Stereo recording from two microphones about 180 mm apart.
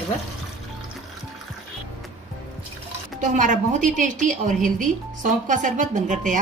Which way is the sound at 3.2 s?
45° right (ahead or behind).